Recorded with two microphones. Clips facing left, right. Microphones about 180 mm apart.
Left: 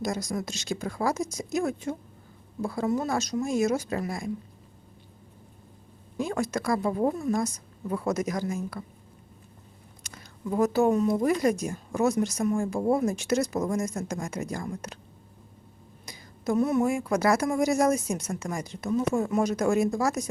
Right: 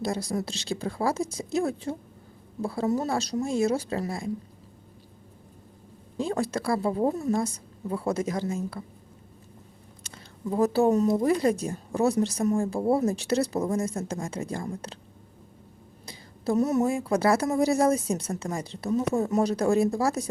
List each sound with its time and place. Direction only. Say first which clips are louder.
0.0 s speech: right 1 dB; 30° right (ahead or behind)
6.1 s speech: right 1 dB; 30° right (ahead or behind)
10.0 s a sound: right 2 dB; 30° right (ahead or behind)
11.1 s speech: right 1 dB; 25° right (ahead or behind)
16.0 s speech: right 1 dB; 35° right (ahead or behind)